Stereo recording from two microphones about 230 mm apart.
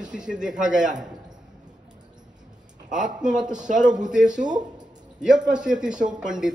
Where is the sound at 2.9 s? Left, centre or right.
Centre.